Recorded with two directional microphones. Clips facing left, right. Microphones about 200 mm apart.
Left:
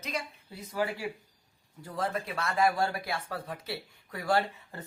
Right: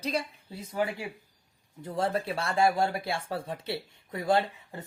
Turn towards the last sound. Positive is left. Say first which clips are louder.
# right 2 dB
turn(degrees=-20)  # may be behind; listen again after turning